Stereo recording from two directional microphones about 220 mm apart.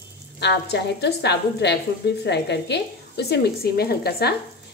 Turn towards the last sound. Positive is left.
turn(degrees=45)  # may be behind; listen again after turning